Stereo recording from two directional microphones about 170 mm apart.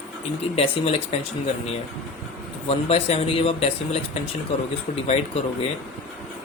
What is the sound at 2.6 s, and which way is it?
Speech, 35° left (ahead or behind).